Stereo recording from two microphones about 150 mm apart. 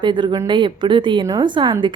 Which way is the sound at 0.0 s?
30° right (ahead or behind).